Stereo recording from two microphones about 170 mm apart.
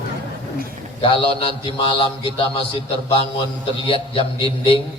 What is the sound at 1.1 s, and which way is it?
A man's voice, 30° left (ahead or behind).